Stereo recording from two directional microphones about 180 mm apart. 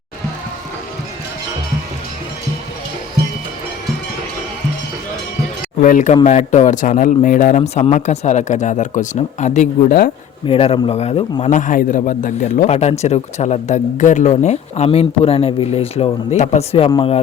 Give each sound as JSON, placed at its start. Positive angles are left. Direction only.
{"t": 5.8, "sound": "a man's voice", "side_deg": 45}
{"t": 10.4, "sound": "a man's voice", "side_deg": 30}
{"t": 11.5, "sound": "a man's voice", "side_deg": 45}